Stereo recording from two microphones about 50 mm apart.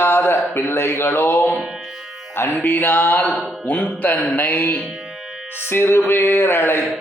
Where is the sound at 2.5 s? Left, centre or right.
Left.